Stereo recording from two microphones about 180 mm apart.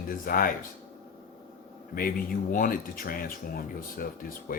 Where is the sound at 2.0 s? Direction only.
55° left (ahead or behind).